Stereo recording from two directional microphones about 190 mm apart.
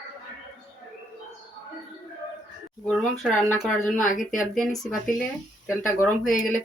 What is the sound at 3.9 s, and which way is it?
Speech, 45° left (ahead or behind).